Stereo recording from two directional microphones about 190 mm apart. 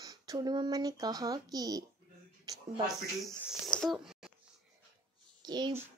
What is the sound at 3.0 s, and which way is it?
Speech, centre (ahead or behind).